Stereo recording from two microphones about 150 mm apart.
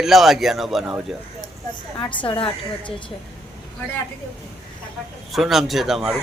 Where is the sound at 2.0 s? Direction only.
35° left (ahead or behind).